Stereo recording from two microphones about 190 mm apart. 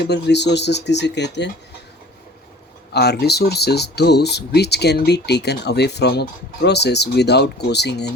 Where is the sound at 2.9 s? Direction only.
60° left (ahead or behind).